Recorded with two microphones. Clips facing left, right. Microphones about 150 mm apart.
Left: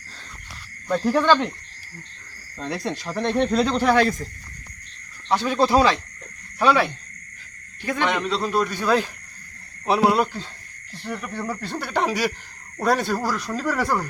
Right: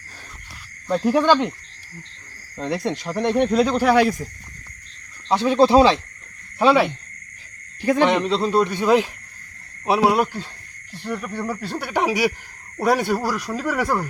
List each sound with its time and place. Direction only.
0.9 s speech: 10° right (ahead or behind)
2.6 s speech: 20° right (ahead or behind)
5.3 s speech: 20° right (ahead or behind)
8.0 s speech: 25° right (ahead or behind); by 14.1 s 10° right (ahead or behind)